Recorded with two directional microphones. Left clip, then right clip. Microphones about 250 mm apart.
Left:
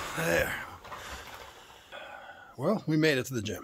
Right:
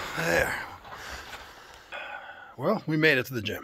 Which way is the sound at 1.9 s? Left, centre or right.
Centre.